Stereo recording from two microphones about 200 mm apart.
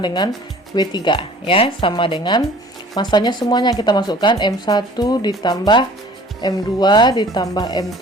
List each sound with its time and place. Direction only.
0.0 s speech: 20° left (ahead or behind)